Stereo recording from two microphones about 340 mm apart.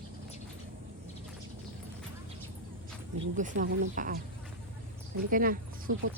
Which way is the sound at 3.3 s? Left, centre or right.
Right.